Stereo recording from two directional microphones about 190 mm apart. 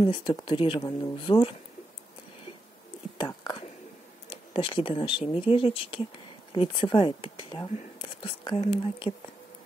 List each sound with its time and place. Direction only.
0.0 s speech: 25° left (ahead or behind)
3.2 s speech: 25° left (ahead or behind)